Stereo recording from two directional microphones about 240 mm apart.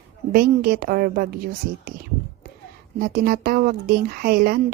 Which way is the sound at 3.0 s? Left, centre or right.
Right.